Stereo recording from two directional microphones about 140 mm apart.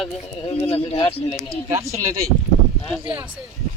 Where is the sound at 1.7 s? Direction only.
20° right (ahead or behind).